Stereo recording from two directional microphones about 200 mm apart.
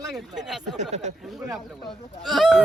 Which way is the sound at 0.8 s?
35° right (ahead or behind).